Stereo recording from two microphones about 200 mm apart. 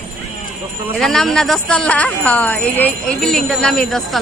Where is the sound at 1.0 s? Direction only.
Centre (ahead or behind).